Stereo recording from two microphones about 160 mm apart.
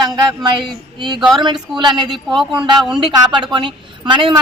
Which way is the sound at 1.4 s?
30° right (ahead or behind).